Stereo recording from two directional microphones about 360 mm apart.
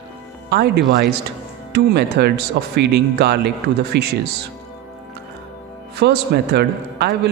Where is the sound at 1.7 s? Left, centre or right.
Right.